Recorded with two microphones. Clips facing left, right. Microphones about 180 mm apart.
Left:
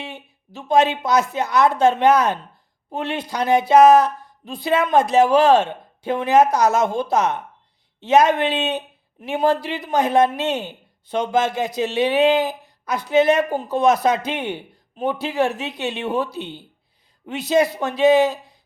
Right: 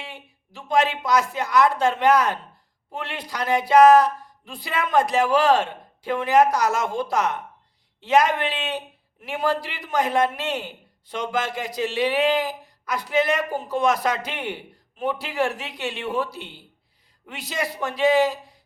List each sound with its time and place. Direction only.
0.0 s speech: 20° left (ahead or behind)